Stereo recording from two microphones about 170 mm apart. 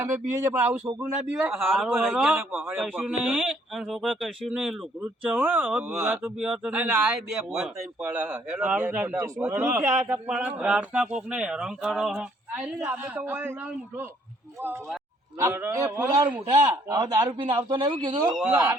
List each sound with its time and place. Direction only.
0.0 s a man's voice: 15° right (ahead or behind)
15.4 s a man's voice: 15° right (ahead or behind)